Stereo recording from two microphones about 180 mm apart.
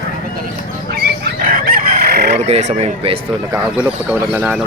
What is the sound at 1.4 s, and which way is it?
Chicken, 55° right (ahead or behind).